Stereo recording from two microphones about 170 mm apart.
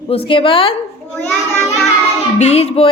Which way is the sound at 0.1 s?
30° left (ahead or behind).